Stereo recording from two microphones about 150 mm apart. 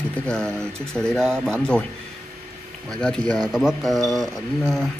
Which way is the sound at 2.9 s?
5° left (ahead or behind).